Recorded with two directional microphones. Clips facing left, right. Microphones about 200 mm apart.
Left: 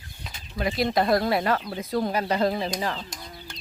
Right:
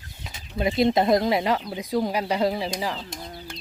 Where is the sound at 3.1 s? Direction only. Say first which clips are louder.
Right 4 dB; 30° right (ahead or behind).